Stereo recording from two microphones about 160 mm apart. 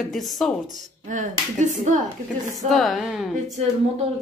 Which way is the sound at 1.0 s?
50° right (ahead or behind).